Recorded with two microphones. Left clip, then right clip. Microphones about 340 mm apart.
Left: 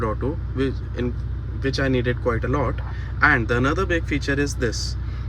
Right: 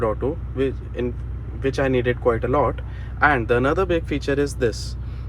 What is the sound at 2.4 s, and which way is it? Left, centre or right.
Speech, centre.